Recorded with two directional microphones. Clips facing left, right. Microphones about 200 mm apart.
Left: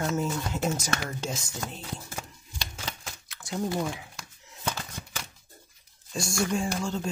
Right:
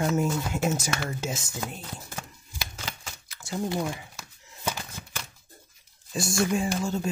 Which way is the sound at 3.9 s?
Centre (ahead or behind).